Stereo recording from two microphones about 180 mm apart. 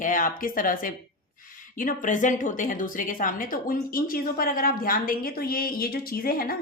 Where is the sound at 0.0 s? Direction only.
50° left (ahead or behind).